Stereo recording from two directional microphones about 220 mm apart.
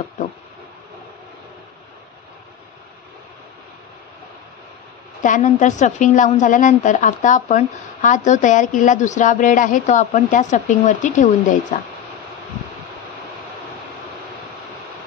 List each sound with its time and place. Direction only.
5.2 s a woman's voice: 35° left (ahead or behind)